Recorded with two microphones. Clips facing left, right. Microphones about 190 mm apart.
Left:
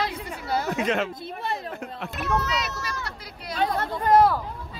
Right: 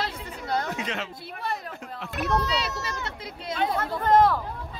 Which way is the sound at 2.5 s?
30° right (ahead or behind).